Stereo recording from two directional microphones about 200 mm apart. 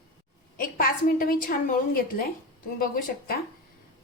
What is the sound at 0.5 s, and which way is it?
A woman's voice, 45° left (ahead or behind).